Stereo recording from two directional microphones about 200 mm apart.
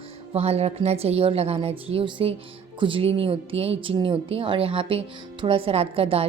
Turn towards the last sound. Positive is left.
turn(degrees=-30)  # may be behind; listen again after turning